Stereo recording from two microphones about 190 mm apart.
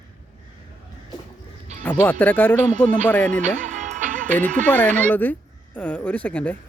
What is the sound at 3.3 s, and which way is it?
Music, 40° right (ahead or behind).